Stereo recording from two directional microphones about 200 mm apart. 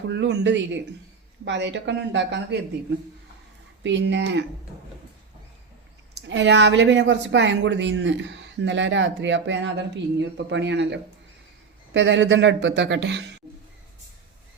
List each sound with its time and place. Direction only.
0.1 s speech: 65° right (ahead or behind)
3.8 s speech: 60° right (ahead or behind)
6.2 s speech: 65° right (ahead or behind)